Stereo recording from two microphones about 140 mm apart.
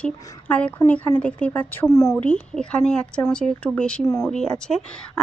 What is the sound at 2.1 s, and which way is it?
Speech, 5° left (ahead or behind).